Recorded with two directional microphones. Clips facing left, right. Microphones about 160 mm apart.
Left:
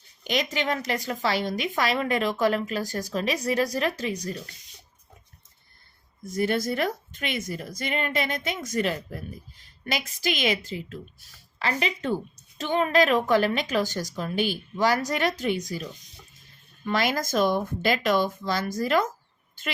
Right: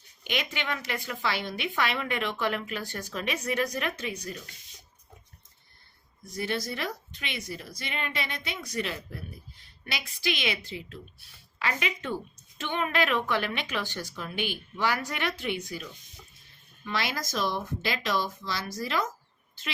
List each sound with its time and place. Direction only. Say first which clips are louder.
0.3 s a woman's voice: left 6 dB; 40° left (ahead or behind)
6.2 s a woman's voice: left 7 dB; 50° left (ahead or behind)